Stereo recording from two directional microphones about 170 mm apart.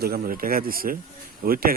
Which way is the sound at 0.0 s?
60° right (ahead or behind).